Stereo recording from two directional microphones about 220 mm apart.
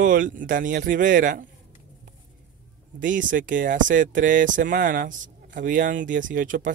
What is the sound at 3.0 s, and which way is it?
Speech, 35° right (ahead or behind).